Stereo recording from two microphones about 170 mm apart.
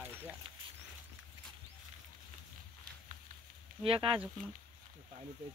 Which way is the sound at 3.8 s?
35° right (ahead or behind).